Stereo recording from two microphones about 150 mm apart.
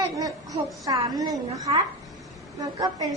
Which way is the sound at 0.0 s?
25° right (ahead or behind).